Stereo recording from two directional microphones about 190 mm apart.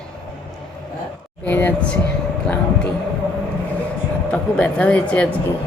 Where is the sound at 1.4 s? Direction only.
10° left (ahead or behind).